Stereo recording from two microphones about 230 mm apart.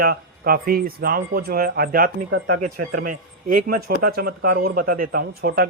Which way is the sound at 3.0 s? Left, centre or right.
Right.